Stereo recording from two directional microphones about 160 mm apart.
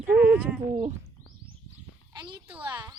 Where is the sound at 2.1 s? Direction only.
30° right (ahead or behind).